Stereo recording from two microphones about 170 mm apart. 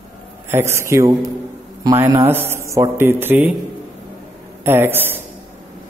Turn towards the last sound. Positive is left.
turn(degrees=-10)  # may be behind; listen again after turning